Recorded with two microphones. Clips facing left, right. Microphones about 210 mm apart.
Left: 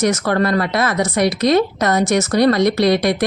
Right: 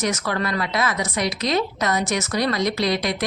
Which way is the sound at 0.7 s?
60° left (ahead or behind).